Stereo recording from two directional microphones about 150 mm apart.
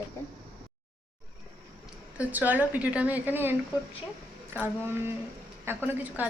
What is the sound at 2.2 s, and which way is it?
Speech, 10° right (ahead or behind).